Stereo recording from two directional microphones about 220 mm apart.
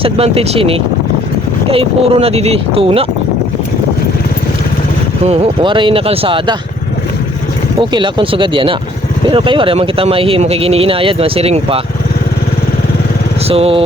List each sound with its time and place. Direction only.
0.0 s speech: 25° right (ahead or behind)
5.2 s speech: 30° right (ahead or behind)
7.8 s speech: 20° right (ahead or behind)
13.5 s speech: 25° right (ahead or behind)